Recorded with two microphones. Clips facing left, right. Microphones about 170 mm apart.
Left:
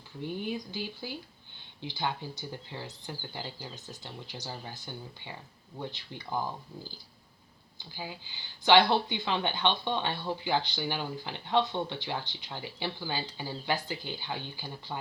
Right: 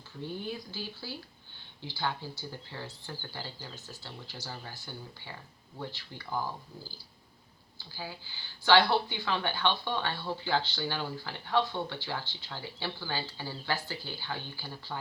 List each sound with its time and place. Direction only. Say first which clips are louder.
0.2 s speech: left 3 dB; 15° left (ahead or behind)
7.8 s speech: left 1 dB; 20° left (ahead or behind)